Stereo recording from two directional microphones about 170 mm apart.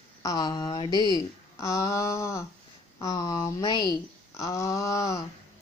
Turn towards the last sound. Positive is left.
turn(degrees=20)  # may be behind; listen again after turning